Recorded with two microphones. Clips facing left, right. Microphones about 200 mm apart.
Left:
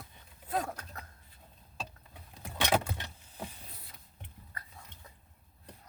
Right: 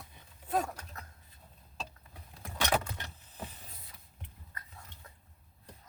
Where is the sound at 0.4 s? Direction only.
Centre (ahead or behind).